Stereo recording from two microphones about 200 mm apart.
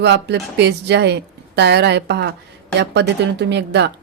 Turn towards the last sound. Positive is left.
turn(degrees=-60)  # may be behind; listen again after turning